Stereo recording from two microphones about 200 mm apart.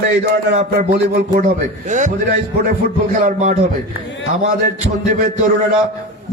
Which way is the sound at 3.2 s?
40° right (ahead or behind).